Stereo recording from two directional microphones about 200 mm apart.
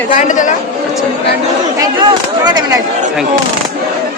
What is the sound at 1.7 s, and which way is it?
Speech, 20° right (ahead or behind).